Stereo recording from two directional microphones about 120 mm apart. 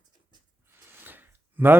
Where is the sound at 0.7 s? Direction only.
20° right (ahead or behind).